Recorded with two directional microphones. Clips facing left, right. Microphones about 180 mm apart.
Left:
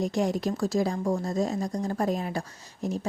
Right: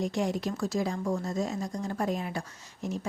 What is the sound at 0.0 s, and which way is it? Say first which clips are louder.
Speech: left 3 dB; 40° left (ahead or behind).